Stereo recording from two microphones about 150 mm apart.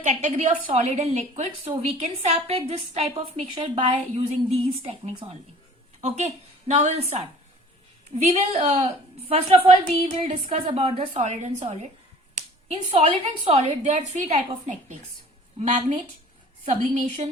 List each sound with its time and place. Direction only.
0.0 s a woman's voice: 50° right (ahead or behind)
8.2 s a woman's voice: 45° right (ahead or behind)
15.5 s a woman's voice: 60° right (ahead or behind)
16.6 s a woman's voice: 45° right (ahead or behind)